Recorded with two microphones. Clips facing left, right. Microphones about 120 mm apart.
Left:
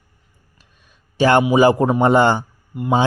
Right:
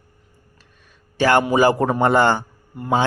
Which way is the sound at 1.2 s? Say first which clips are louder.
Left 2 dB; 20° left (ahead or behind).